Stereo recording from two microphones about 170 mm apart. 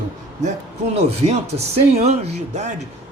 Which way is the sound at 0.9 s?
40° right (ahead or behind).